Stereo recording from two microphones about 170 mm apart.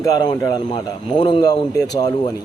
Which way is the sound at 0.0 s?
25° left (ahead or behind).